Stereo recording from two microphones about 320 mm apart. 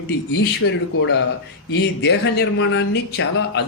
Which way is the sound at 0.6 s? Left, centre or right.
Left.